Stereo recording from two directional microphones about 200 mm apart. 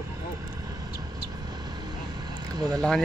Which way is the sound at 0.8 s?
20° right (ahead or behind).